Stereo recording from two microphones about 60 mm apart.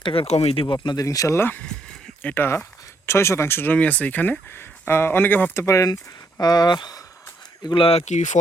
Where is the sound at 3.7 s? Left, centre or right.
Left.